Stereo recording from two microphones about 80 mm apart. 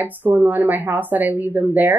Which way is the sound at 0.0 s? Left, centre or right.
Right.